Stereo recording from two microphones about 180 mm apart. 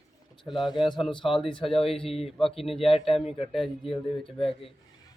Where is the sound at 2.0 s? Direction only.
35° left (ahead or behind).